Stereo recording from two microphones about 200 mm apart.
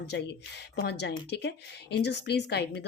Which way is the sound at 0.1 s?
55° left (ahead or behind).